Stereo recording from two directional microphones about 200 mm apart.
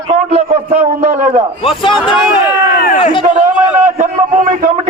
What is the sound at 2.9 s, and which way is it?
Speech, 40° left (ahead or behind).